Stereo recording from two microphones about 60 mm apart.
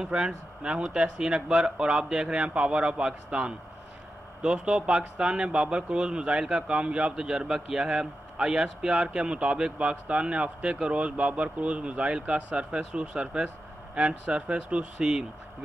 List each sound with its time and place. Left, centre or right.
0.0 s a man's voice: centre